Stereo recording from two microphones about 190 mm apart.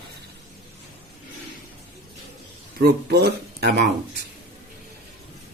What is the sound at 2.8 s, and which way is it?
Speech, 55° right (ahead or behind).